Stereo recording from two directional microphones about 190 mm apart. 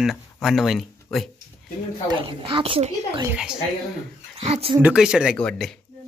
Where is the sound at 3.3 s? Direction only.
5° right (ahead or behind).